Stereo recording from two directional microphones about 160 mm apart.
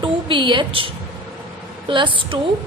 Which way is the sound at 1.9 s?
30° right (ahead or behind).